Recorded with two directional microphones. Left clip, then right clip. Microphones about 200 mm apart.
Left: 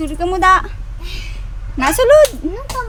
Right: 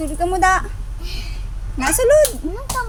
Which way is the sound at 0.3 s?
10° left (ahead or behind).